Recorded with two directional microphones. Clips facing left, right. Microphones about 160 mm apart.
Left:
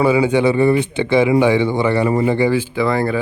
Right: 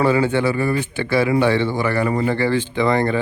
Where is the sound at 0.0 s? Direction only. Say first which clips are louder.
Left 3 dB; 10° left (ahead or behind).